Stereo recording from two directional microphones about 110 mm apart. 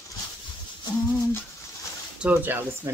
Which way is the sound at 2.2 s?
15° right (ahead or behind).